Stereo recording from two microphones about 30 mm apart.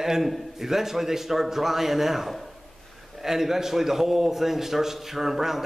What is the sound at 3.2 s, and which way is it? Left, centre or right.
A man's voice, centre.